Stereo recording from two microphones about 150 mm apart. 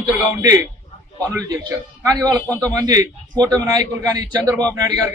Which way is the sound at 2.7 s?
25° right (ahead or behind).